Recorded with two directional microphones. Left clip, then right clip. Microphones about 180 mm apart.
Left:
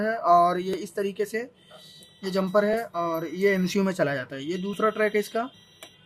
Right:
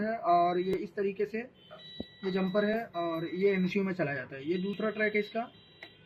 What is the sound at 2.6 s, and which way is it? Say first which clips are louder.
Speech: left 6 dB; 60° left (ahead or behind).